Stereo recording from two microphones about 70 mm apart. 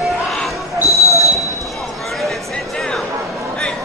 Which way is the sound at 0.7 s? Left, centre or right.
Left.